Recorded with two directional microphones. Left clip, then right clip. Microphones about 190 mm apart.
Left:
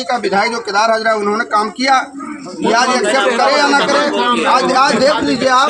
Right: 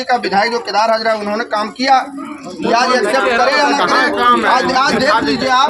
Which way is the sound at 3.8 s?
35° right (ahead or behind).